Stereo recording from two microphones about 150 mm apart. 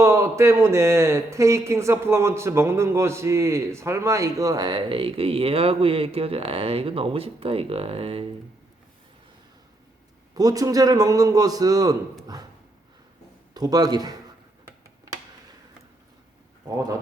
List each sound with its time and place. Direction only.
0.0 s speech: 20° right (ahead or behind); by 8.3 s 40° right (ahead or behind)
10.3 s speech: 25° right (ahead or behind)
13.5 s a man's voice: 25° right (ahead or behind)